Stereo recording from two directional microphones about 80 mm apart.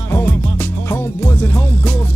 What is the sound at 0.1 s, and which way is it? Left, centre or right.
Music, left.